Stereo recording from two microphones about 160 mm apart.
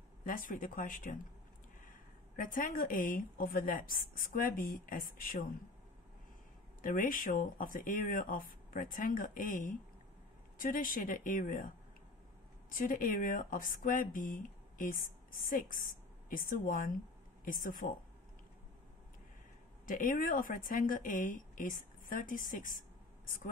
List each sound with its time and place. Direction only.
0.2 s speech: 60° left (ahead or behind)
6.8 s speech: 60° left (ahead or behind)
12.7 s speech: 60° left (ahead or behind)
19.9 s speech: 60° left (ahead or behind)